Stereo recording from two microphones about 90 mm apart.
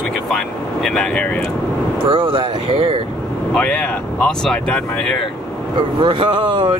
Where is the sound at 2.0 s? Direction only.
70° right (ahead or behind); by 3.0 s 85° right.